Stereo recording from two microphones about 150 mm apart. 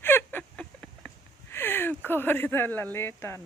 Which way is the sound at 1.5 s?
15° left (ahead or behind).